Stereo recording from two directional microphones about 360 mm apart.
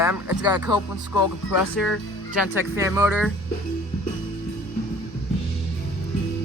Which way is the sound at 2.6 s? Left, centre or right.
Centre.